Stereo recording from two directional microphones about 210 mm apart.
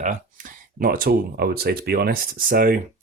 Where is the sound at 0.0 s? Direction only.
40° right (ahead or behind).